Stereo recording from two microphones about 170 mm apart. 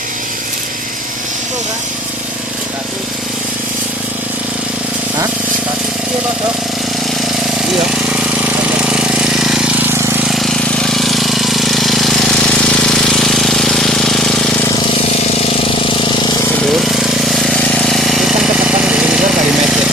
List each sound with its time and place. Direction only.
7.9 s jackhammer: 5° right (ahead or behind)
10.2 s vehicle: centre (ahead or behind)
15.3 s vehicle: 35° left (ahead or behind)
16.7 s jackhammer: centre (ahead or behind)